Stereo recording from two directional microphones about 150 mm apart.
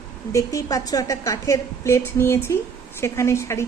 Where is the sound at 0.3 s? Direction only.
20° left (ahead or behind).